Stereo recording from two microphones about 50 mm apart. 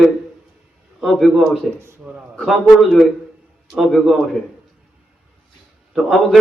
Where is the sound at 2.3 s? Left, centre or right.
Centre.